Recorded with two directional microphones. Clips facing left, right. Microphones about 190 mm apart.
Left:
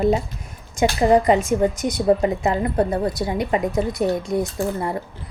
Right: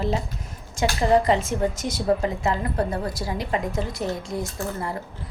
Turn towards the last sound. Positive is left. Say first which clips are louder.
# left 6 dB
turn(degrees=20)  # may be behind; listen again after turning